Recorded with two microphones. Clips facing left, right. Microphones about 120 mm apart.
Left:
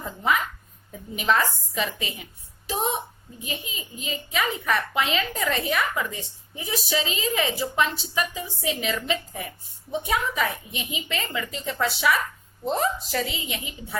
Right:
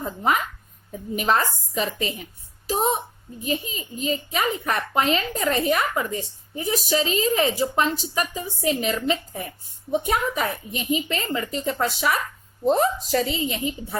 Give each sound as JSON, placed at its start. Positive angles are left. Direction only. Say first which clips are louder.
{"t": 0.0, "sound": "a sound", "louder": "right 2 dB", "side_deg": -40}
{"t": 1.1, "sound": "a child's voice", "louder": "right 1 dB", "side_deg": -45}
{"t": 3.4, "sound": "a child's voice", "louder": "right 7 dB", "side_deg": -40}